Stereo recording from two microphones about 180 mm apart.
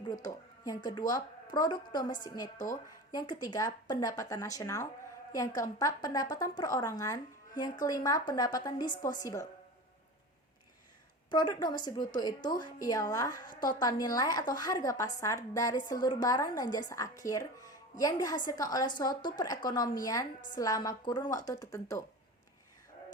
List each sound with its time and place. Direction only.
0.0 s speech: 20° left (ahead or behind)
11.3 s speech: 25° left (ahead or behind)